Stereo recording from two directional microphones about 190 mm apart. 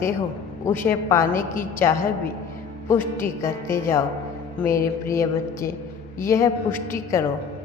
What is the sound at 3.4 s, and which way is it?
Speech, 15° left (ahead or behind).